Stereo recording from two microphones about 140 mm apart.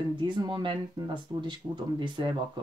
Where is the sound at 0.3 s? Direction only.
35° right (ahead or behind).